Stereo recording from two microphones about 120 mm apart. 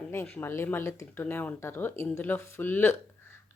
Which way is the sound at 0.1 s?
20° left (ahead or behind).